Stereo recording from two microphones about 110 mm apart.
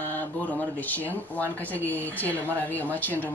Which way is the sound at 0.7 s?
15° left (ahead or behind).